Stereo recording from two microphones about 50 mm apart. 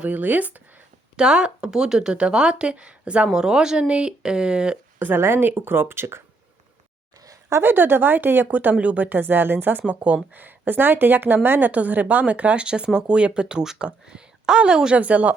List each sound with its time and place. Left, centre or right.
0.0 s speech: right
1.1 s speech: centre
3.3 s speech: centre
4.9 s a woman's voice: right
7.6 s speech: right
9.8 s speech: right
10.3 s speech: right
11.7 s speech: right; by 14.9 s centre
14.9 s speech: right